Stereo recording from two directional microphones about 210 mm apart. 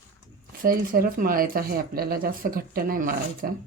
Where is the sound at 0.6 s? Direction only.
45° right (ahead or behind).